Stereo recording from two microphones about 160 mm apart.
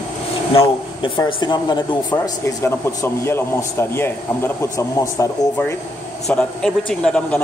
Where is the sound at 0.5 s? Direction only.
30° left (ahead or behind).